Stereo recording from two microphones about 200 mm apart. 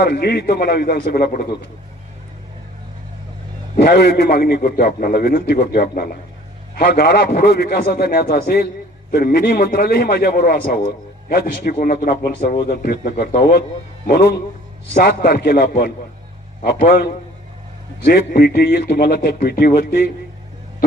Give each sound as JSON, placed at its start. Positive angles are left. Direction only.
{"t": 0.0, "sound": "a man's voice", "side_deg": 50}
{"t": 3.8, "sound": "a man's voice", "side_deg": 55}